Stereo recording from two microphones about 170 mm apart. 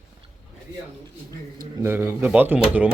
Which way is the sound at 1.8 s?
15° right (ahead or behind).